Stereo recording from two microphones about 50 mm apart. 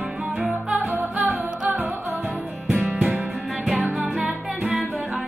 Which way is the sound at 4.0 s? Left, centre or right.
Centre.